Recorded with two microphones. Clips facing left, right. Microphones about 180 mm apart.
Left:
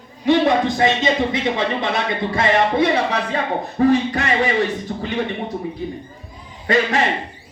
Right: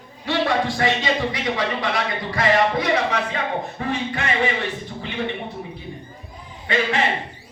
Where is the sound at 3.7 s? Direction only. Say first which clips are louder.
Left 10 dB; 40° left (ahead or behind).